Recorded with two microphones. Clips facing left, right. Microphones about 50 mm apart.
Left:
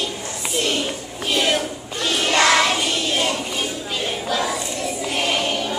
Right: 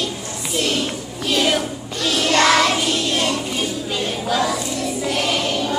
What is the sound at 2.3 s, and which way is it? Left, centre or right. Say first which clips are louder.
Music: right 1 dB; centre.